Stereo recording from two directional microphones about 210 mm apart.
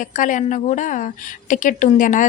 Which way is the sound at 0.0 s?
40° left (ahead or behind).